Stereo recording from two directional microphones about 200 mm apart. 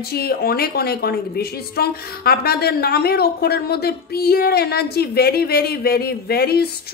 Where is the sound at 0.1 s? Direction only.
50° left (ahead or behind).